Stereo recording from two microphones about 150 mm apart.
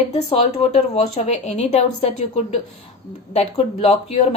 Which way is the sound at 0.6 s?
45° left (ahead or behind).